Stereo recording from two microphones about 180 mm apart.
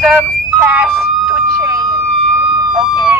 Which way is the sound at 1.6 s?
20° right (ahead or behind).